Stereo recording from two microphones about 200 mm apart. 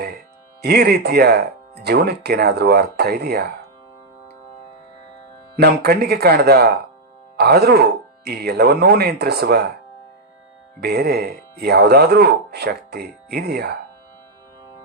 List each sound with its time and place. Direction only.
0.6 s speech: 55° right (ahead or behind)
5.5 s speech: 55° right (ahead or behind)
10.8 s speech: 55° right (ahead or behind)